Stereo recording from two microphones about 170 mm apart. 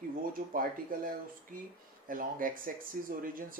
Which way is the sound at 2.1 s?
55° right (ahead or behind).